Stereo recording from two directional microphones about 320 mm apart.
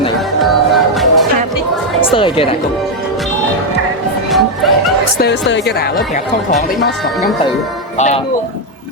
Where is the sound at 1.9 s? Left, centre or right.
Centre.